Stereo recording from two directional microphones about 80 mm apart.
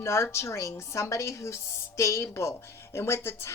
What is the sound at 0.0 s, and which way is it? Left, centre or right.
A woman's voice, left.